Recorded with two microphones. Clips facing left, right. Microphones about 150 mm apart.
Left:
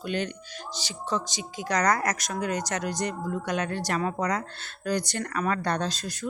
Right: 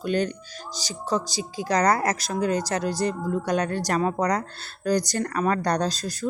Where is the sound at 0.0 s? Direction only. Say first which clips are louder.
Right 5 dB; 40° right (ahead or behind).